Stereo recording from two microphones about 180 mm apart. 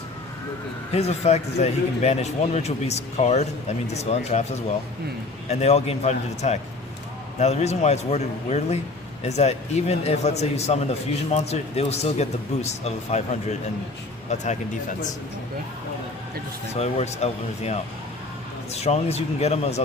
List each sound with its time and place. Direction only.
0.9 s speech: 35° left (ahead or behind)
5.5 s speech: 35° left (ahead or behind)
16.7 s speech: 35° left (ahead or behind)